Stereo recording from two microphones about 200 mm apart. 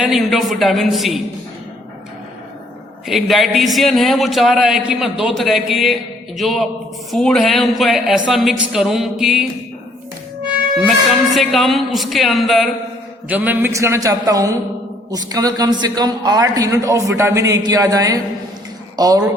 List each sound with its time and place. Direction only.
0.0 s speech: centre (ahead or behind)
3.1 s speech: centre (ahead or behind)
11.3 s a man's voice: centre (ahead or behind); by 19.3 s 20° right (ahead or behind)